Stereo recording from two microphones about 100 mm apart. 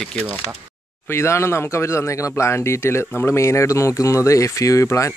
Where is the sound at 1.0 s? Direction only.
25° left (ahead or behind).